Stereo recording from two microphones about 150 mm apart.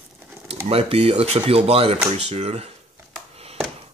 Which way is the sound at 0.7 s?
40° right (ahead or behind).